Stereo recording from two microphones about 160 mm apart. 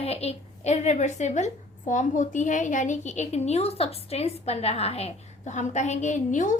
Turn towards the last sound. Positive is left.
turn(degrees=50)  # may be behind; listen again after turning